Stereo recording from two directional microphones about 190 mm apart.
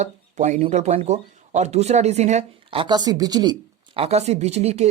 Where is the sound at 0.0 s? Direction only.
40° right (ahead or behind).